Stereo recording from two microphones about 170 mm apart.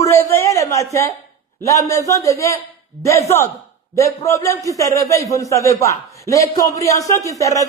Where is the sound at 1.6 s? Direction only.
20° left (ahead or behind).